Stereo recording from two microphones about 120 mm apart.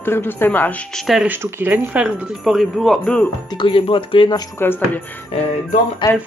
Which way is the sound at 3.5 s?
45° left (ahead or behind).